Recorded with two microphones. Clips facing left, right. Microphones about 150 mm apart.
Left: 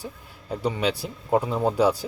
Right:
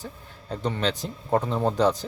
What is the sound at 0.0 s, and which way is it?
Speech, 10° left (ahead or behind).